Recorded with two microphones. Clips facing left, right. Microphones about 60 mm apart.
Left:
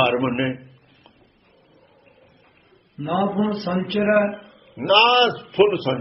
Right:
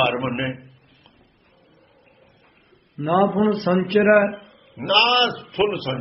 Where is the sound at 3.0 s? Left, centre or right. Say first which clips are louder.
Right 3 dB; right.